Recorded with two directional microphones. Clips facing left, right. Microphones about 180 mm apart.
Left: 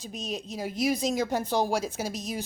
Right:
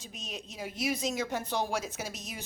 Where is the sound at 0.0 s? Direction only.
35° left (ahead or behind).